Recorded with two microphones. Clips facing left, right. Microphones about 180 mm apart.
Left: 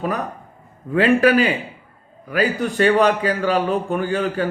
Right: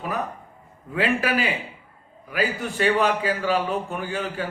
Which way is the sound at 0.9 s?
50° left (ahead or behind).